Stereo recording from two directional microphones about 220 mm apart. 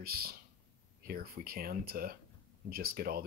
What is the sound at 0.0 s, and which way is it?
Speech, 45° right (ahead or behind).